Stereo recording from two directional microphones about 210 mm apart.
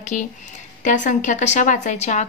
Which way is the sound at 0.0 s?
35° left (ahead or behind).